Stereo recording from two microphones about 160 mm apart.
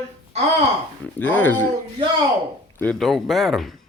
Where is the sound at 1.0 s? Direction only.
10° left (ahead or behind).